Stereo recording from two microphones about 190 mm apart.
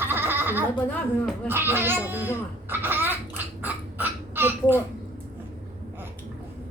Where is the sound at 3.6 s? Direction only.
10° right (ahead or behind).